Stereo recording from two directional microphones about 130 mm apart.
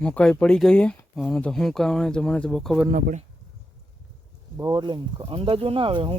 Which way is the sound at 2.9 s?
70° right (ahead or behind).